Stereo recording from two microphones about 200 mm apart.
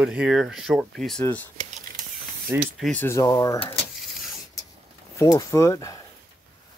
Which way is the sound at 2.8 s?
10° left (ahead or behind).